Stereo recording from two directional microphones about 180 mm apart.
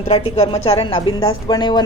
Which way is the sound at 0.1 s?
35° left (ahead or behind).